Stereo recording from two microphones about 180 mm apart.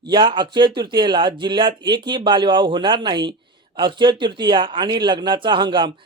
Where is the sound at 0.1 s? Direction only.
25° right (ahead or behind).